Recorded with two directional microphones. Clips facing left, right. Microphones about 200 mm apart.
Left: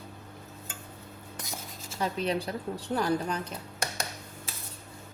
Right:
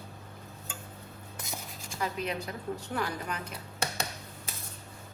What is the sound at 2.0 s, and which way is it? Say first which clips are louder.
Speech: left 4 dB; 30° left (ahead or behind).